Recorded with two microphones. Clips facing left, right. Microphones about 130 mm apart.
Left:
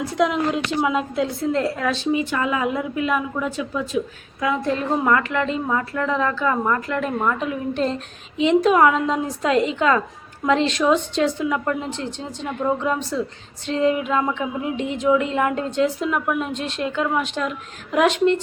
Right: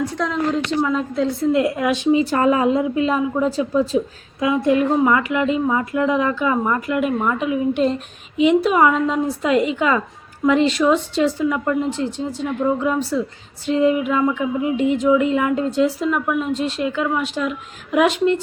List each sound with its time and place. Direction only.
0.0 s a woman's voice: 10° left (ahead or behind)
1.6 s a woman's voice: 15° right (ahead or behind)
2.1 s speech: 40° right (ahead or behind)
2.6 s a woman's voice: 25° right (ahead or behind)
4.4 s a woman's voice: 15° right (ahead or behind)